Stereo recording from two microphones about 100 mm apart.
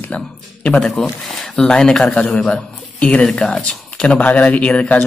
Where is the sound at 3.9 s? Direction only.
10° left (ahead or behind).